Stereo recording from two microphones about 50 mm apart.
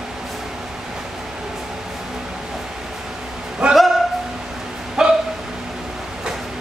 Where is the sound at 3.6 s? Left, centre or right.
Centre.